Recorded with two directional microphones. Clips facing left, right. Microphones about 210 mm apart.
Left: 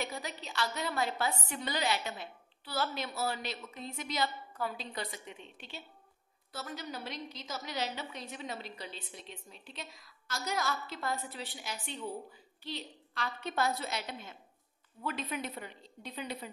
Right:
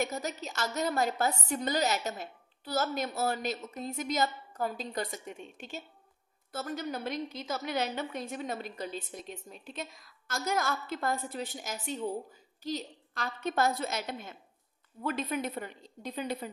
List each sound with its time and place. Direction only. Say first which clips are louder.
0.0 s a woman's voice: right 6 dB; 45° right (ahead or behind)